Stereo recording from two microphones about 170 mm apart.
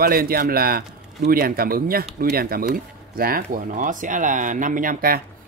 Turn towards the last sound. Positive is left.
turn(degrees=-55)  # may be behind; listen again after turning